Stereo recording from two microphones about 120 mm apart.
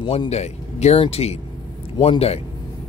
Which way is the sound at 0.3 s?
65° left (ahead or behind).